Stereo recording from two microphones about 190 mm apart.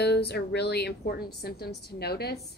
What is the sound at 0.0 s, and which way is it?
A woman's voice, 60° left (ahead or behind).